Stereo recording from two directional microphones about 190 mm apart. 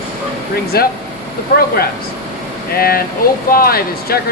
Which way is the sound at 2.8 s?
50° left (ahead or behind).